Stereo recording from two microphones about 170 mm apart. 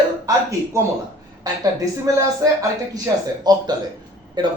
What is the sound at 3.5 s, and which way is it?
A woman's voice, 25° right (ahead or behind).